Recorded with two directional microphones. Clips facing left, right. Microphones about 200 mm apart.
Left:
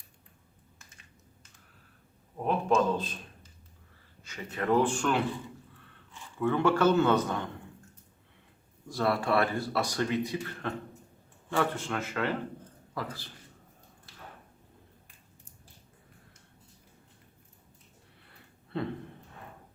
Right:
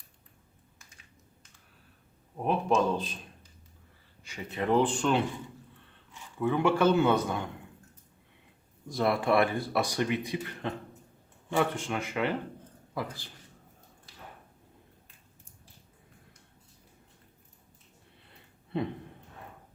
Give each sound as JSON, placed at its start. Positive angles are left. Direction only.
{"t": 2.4, "sound": "speech", "side_deg": -15}
{"t": 4.3, "sound": "a man's voice", "side_deg": -15}
{"t": 8.9, "sound": "speech", "side_deg": -15}